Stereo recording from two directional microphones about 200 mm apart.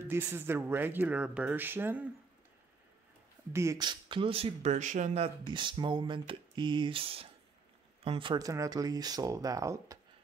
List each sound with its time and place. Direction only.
0.1 s speech: 10° right (ahead or behind)
3.5 s speech: 15° right (ahead or behind)